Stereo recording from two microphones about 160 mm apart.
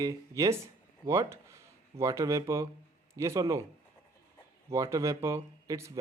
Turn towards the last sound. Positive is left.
turn(degrees=-20)  # may be behind; listen again after turning